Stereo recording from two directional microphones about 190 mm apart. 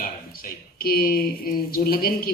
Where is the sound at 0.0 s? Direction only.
50° left (ahead or behind).